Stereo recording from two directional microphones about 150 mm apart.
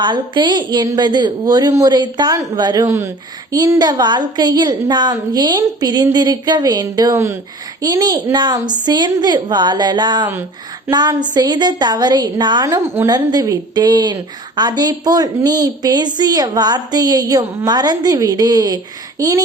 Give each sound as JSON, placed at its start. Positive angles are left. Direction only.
{"t": 0.0, "sound": "a woman's voice", "side_deg": -30}